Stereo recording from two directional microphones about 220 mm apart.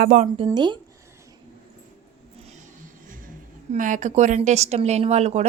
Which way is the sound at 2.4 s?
35° right (ahead or behind).